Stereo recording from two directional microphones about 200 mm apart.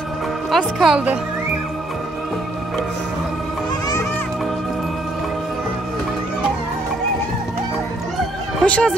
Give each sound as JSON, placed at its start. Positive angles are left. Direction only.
{"t": 0.5, "sound": "speech", "side_deg": 0}
{"t": 8.5, "sound": "speech", "side_deg": 5}